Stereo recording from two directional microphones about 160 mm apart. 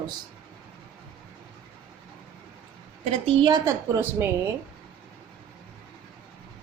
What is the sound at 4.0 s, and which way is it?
Speech, 15° right (ahead or behind).